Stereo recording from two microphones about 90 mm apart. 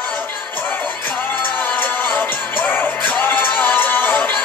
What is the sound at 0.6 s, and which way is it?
Music, 20° left (ahead or behind).